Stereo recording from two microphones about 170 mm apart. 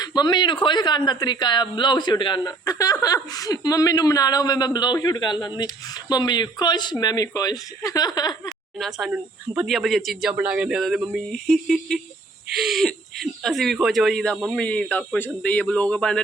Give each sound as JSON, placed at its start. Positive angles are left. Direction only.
{"t": 0.0, "sound": "speech", "side_deg": 25}
{"t": 8.8, "sound": "speech", "side_deg": -5}